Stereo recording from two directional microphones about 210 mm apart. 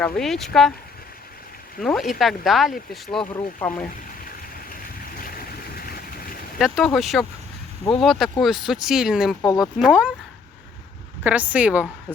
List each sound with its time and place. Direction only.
0.0 s speech: centre (ahead or behind)
1.8 s speech: centre (ahead or behind)
5.2 s boat: 45° left (ahead or behind)
6.6 s speech: centre (ahead or behind)
11.2 s speech: 5° right (ahead or behind)